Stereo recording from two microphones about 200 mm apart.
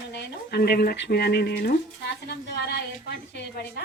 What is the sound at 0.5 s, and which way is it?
Speech, 55° left (ahead or behind).